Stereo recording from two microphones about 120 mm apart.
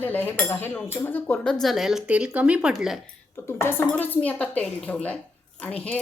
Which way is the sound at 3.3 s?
20° left (ahead or behind).